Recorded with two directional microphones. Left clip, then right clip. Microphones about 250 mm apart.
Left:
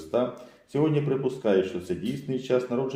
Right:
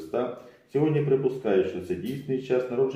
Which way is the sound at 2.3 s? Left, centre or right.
Left.